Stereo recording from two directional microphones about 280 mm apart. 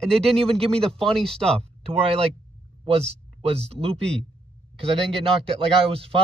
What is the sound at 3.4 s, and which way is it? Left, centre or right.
Speech, right.